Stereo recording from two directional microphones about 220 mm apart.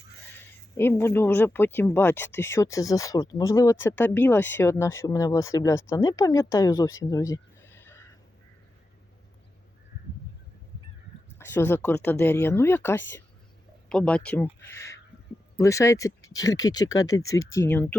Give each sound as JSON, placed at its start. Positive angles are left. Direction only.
{"t": 0.8, "sound": "speech", "side_deg": 10}
{"t": 11.3, "sound": "speech", "side_deg": 10}